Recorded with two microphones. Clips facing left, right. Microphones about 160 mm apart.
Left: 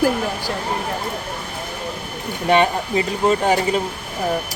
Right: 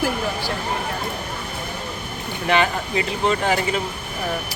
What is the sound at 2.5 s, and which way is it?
Speech, 30° left (ahead or behind).